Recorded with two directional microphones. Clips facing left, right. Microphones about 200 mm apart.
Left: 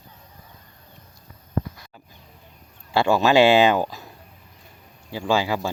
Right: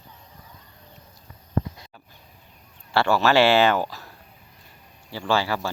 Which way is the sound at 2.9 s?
15° left (ahead or behind).